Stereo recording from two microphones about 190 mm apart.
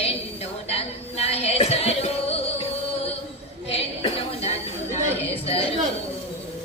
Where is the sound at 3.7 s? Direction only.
30° left (ahead or behind).